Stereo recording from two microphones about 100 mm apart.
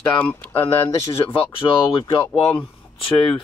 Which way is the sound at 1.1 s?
60° left (ahead or behind).